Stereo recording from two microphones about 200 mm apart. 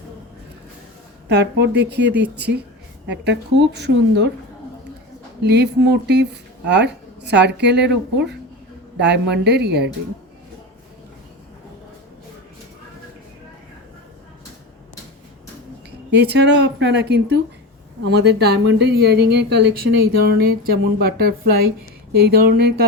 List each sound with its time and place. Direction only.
1.3 s a woman's voice: 55° right (ahead or behind)
5.4 s a woman's voice: 55° right (ahead or behind)
16.0 s a woman's voice: 55° right (ahead or behind)